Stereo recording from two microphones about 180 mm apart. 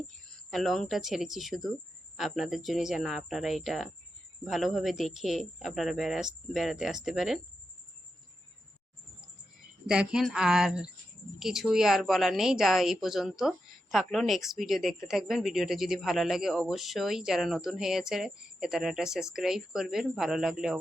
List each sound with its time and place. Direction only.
0.3 s speech: centre (ahead or behind)
9.8 s speech: 5° right (ahead or behind)